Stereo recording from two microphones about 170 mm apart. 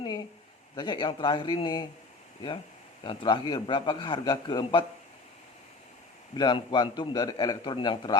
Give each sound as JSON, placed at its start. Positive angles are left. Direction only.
{"t": 0.8, "sound": "a man's voice", "side_deg": 25}
{"t": 3.0, "sound": "a man's voice", "side_deg": 30}
{"t": 6.3, "sound": "a man's voice", "side_deg": 25}